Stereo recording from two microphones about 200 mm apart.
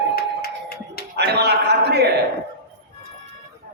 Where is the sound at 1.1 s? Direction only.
55° right (ahead or behind).